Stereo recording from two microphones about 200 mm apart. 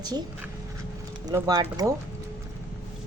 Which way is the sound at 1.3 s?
20° right (ahead or behind).